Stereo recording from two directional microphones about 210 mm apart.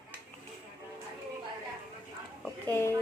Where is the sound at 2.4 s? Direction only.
10° left (ahead or behind).